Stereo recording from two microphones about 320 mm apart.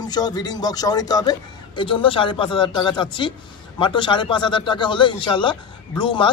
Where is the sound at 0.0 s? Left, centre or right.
Centre.